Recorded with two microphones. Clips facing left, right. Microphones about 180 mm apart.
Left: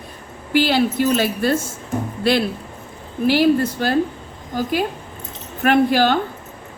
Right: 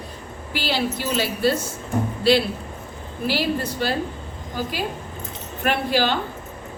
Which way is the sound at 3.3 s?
50° left (ahead or behind).